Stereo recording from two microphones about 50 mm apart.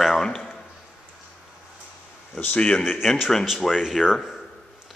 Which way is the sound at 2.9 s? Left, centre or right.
Centre.